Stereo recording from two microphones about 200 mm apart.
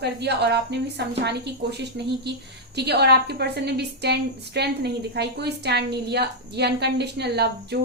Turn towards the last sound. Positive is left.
turn(degrees=-55)  # may be behind; listen again after turning